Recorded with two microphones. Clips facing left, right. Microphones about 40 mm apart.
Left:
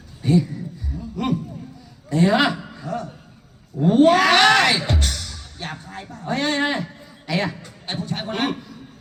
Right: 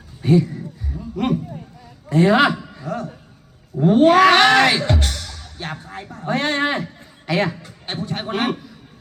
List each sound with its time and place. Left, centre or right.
0.2 s a sound: centre
2.1 s a man's voice: centre
4.9 s music: centre
5.9 s a man's voice: centre
7.5 s a man's voice: centre